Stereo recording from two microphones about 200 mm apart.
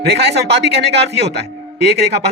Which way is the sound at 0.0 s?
55° right (ahead or behind).